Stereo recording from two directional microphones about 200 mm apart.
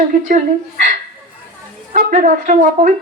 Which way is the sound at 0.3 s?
40° right (ahead or behind).